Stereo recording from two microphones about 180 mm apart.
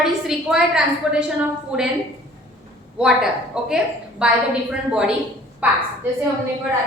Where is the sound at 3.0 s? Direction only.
5° right (ahead or behind).